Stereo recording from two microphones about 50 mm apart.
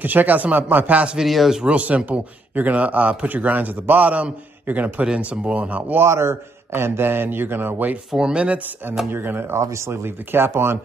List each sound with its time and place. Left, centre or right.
0.0 s a man's voice: right
1.1 s speech: centre
1.6 s a man's voice: right
6.0 s speech: right
8.2 s speech: centre
9.1 s speech: right
9.6 s speech: right
10.0 s speech: right